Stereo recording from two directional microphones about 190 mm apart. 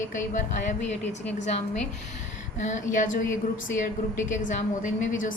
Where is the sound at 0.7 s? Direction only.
35° left (ahead or behind).